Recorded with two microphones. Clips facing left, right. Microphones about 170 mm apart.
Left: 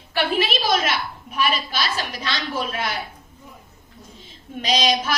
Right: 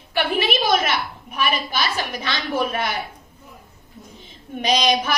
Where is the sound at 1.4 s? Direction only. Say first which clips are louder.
Right 1 dB; 60° right (ahead or behind).